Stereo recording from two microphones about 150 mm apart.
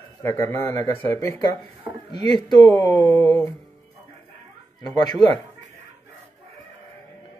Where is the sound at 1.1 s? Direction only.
20° left (ahead or behind).